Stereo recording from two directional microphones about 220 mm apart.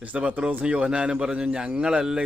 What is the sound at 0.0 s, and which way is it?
A man's voice, 5° right (ahead or behind).